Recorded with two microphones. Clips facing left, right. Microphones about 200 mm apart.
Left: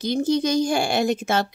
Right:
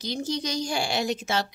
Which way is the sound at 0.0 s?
55° left (ahead or behind).